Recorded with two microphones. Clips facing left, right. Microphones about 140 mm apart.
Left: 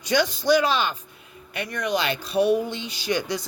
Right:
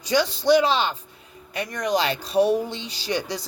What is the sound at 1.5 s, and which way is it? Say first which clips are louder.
Speech: right 2 dB; 40° right (ahead or behind).